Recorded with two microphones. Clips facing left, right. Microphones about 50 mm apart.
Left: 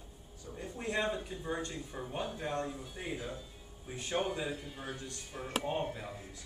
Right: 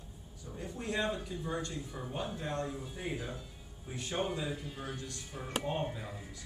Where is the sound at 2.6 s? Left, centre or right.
Centre.